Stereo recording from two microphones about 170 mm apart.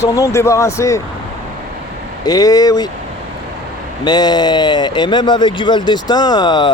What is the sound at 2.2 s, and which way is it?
Speech, 20° left (ahead or behind).